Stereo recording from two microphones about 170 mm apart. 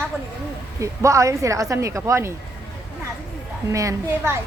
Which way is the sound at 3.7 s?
20° right (ahead or behind).